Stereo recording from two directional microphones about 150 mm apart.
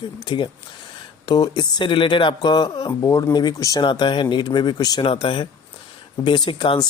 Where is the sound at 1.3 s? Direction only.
30° left (ahead or behind).